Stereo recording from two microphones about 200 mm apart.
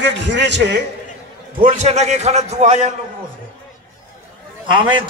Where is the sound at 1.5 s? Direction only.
40° right (ahead or behind).